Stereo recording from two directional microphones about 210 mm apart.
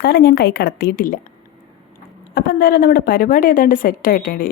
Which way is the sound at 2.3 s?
45° left (ahead or behind).